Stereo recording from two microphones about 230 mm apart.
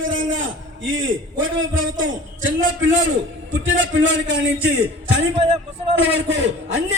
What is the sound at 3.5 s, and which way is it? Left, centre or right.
A man's voice, right.